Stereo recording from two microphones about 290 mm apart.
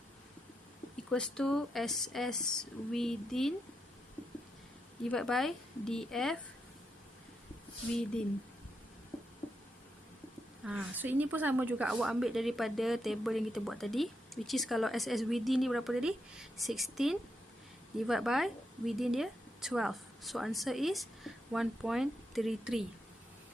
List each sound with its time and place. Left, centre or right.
1.1 s speech: centre
5.0 s speech: centre
7.9 s speech: centre
10.6 s a woman's voice: centre